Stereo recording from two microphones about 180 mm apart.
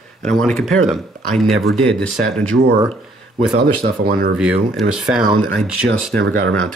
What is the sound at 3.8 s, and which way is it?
Speech, 55° right (ahead or behind).